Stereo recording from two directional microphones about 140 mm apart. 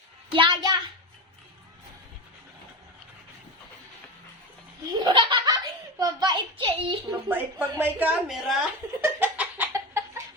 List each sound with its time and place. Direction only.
0.3 s a child's voice: 35° right (ahead or behind)
4.9 s laughter: 30° right (ahead or behind)
6.0 s a child's voice: 25° right (ahead or behind)
7.3 s speech: 15° right (ahead or behind)
8.3 s a woman's voice: centre (ahead or behind)
9.0 s a sound: 15° right (ahead or behind)